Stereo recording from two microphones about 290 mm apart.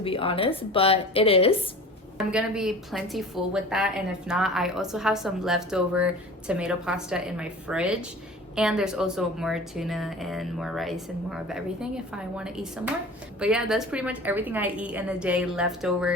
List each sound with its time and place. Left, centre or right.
0.0 s a woman's voice: centre
2.1 s a woman's voice: centre